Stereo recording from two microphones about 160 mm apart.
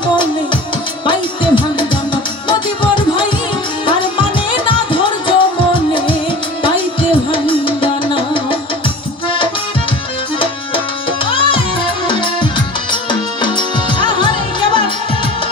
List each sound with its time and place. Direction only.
1.0 s music: 30° left (ahead or behind)
4.6 s music: 30° left (ahead or behind)
7.2 s music: 30° left (ahead or behind)
11.2 s music: 35° left (ahead or behind)